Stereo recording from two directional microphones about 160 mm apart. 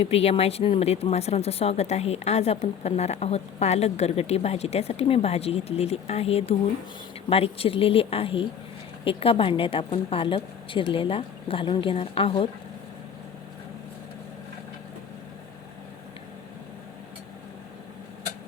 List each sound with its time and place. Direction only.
0.0 s speech: 40° left (ahead or behind)